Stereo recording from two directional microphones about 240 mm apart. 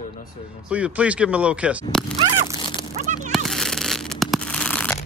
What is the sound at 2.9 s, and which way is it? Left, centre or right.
Speech, right.